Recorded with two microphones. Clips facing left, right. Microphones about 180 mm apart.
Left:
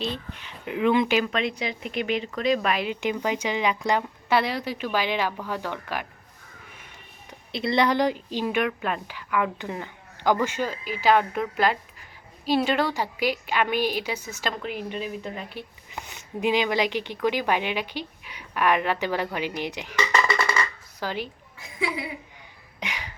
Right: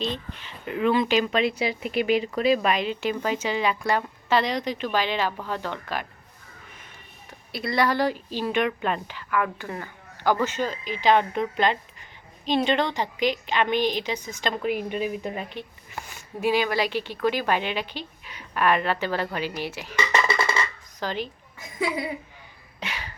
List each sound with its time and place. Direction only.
0.6 s speech: 10° left (ahead or behind)
1.2 s speech: 5° right (ahead or behind)
2.7 s speech: 10° left (ahead or behind)
7.3 s speech: 25° left (ahead or behind)
8.6 s speech: 5° left (ahead or behind)
14.5 s speech: 10° right (ahead or behind)
15.4 s speech: 15° left (ahead or behind)
20.2 s music: 25° right (ahead or behind)
21.0 s speech: 10° left (ahead or behind)
22.8 s a sound: 15° left (ahead or behind)